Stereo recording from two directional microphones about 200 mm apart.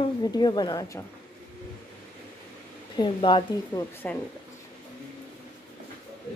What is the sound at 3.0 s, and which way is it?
Speech, 25° left (ahead or behind).